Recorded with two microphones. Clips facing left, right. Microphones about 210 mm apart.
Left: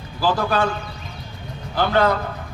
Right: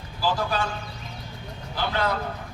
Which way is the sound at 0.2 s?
60° left (ahead or behind).